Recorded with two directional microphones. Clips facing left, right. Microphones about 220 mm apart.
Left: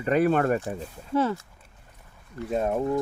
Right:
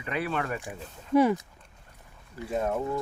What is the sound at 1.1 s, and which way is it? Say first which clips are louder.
Speech: right 3 dB; 15° right (ahead or behind).